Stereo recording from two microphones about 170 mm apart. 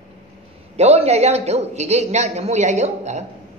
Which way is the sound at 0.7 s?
40° right (ahead or behind).